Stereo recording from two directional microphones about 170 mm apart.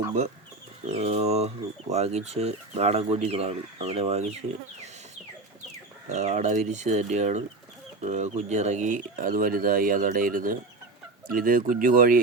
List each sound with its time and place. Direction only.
0.9 s speech: 40° right (ahead or behind)
6.1 s speech: 45° right (ahead or behind)